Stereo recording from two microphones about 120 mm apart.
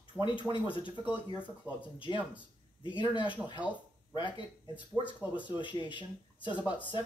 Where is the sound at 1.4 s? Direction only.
10° right (ahead or behind).